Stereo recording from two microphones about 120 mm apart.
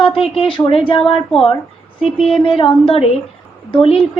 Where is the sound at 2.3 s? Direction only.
50° left (ahead or behind).